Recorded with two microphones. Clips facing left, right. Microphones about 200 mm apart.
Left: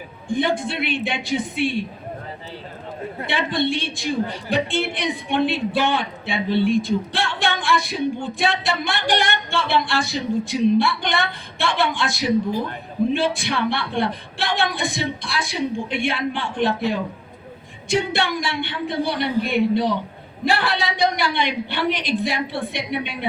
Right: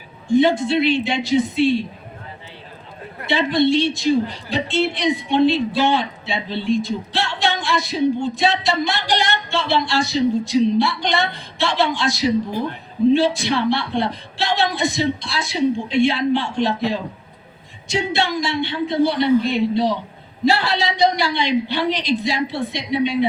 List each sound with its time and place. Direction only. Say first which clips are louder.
0.3 s a man's voice: right 6 dB; 55° left (ahead or behind)
3.2 s a man's voice: right 6 dB; 55° left (ahead or behind)
17.8 s a man's voice: even; 55° left (ahead or behind)